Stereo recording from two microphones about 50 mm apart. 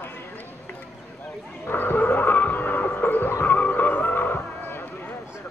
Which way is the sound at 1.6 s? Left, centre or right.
Left.